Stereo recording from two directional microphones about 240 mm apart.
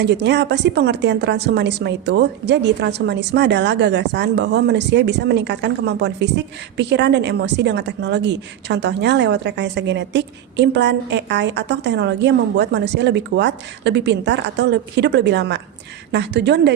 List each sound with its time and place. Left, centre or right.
0.0 s a woman's voice: right